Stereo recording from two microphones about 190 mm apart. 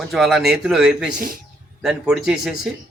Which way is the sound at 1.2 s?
50° right (ahead or behind).